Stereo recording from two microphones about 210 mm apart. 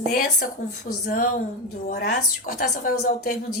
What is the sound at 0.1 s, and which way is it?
A woman's voice, 45° left (ahead or behind).